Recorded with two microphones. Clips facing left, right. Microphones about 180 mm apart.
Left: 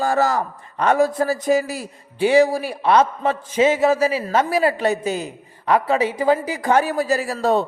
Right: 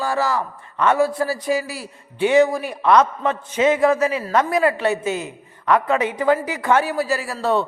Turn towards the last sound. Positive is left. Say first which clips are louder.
# left 2 dB
turn(degrees=40)  # may be behind; listen again after turning